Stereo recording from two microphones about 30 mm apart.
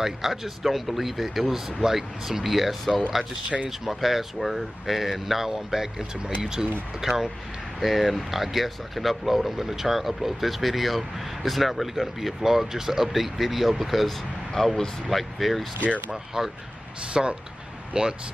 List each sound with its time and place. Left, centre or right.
0.0 s speech: centre
1.5 s speech: centre
7.8 s speech: centre
14.6 s speech: centre
15.0 s speech: centre
16.3 s speech: centre
17.1 s speech: right